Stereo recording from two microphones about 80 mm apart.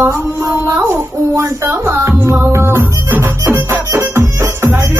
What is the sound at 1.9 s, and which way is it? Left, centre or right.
Music, right.